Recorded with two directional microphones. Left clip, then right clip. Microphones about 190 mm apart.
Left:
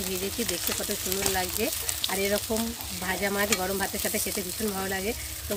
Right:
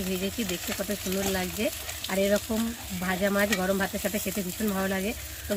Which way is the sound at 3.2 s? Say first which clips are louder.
Right 2 dB; 45° right (ahead or behind).